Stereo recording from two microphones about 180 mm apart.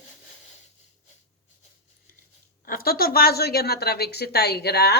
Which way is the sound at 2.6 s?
55° left (ahead or behind).